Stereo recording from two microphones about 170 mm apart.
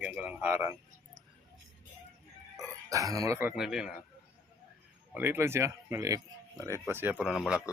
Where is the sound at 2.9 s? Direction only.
20° right (ahead or behind).